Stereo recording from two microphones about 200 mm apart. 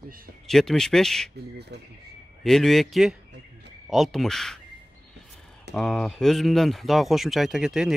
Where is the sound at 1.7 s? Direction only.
55° right (ahead or behind).